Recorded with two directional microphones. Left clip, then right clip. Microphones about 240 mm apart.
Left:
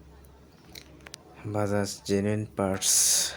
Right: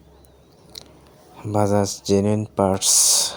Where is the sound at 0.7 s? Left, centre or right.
Centre.